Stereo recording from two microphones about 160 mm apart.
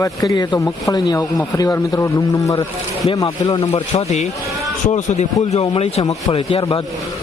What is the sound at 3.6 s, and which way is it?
Speech, 40° left (ahead or behind).